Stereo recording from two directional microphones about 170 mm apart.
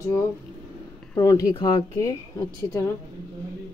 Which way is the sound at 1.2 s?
20° left (ahead or behind).